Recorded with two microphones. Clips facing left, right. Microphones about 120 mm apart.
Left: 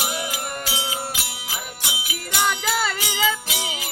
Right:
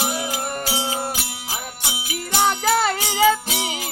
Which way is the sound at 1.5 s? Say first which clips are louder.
Right 2 dB; 30° right (ahead or behind).